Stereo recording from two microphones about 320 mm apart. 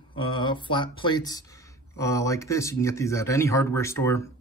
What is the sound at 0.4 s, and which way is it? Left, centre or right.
Speech, centre.